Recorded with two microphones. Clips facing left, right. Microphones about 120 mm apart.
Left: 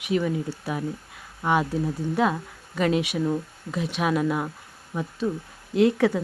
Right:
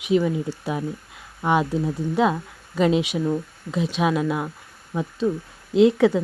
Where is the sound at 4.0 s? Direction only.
5° right (ahead or behind).